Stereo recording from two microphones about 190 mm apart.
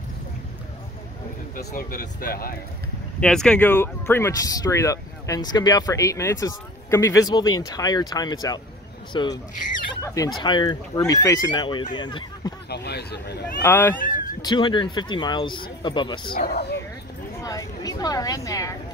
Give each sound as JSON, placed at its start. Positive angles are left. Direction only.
{"t": 1.6, "sound": "speech", "side_deg": 50}
{"t": 3.2, "sound": "speech", "side_deg": 5}
{"t": 12.6, "sound": "speech", "side_deg": 60}
{"t": 13.6, "sound": "speech", "side_deg": 10}
{"t": 14.4, "sound": "speech", "side_deg": 25}
{"t": 16.3, "sound": "speech", "side_deg": 60}
{"t": 17.4, "sound": "a sound", "side_deg": 20}